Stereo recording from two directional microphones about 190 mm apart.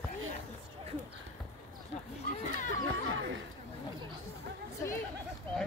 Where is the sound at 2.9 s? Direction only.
90° right.